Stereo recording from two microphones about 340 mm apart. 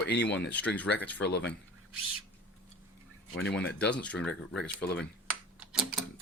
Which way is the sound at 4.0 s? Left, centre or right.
Centre.